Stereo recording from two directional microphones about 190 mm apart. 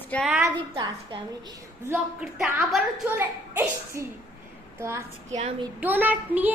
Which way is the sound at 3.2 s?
15° right (ahead or behind).